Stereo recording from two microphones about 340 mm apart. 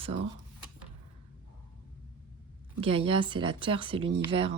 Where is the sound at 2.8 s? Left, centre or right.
Centre.